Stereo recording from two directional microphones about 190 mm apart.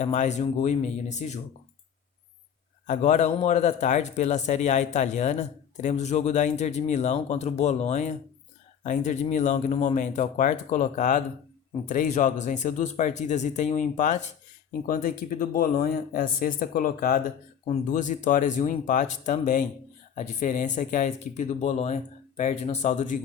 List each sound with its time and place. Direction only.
0.0 s a man's voice: 40° left (ahead or behind)
2.8 s a man's voice: 40° left (ahead or behind)